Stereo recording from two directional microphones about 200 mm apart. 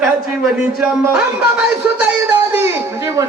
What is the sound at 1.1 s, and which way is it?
Music, 5° right (ahead or behind).